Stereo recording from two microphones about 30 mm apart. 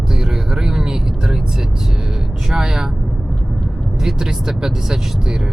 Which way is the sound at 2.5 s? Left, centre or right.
Centre.